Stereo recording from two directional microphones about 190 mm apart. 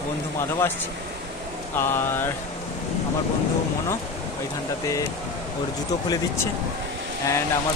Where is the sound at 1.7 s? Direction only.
10° left (ahead or behind).